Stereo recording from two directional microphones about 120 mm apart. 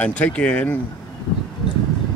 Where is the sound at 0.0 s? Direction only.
10° left (ahead or behind).